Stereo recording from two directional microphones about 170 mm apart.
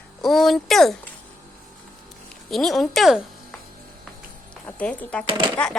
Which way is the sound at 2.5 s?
Centre (ahead or behind).